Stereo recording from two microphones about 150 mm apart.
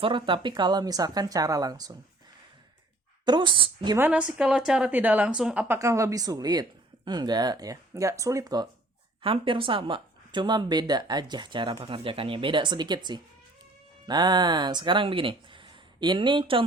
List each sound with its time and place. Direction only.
0.0 s a woman's voice: 35° right (ahead or behind)
3.2 s speech: 30° right (ahead or behind)
3.9 s a woman's voice: 10° right (ahead or behind)
9.2 s speech: 35° right (ahead or behind)